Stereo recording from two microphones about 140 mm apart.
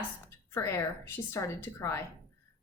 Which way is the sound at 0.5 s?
20° left (ahead or behind).